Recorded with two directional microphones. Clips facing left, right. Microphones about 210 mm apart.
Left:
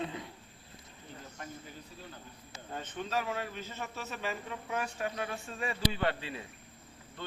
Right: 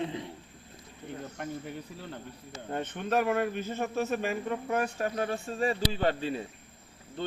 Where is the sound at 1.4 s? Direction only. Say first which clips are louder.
Right 8 dB; 65° right (ahead or behind); by 6.4 s 35° right (ahead or behind).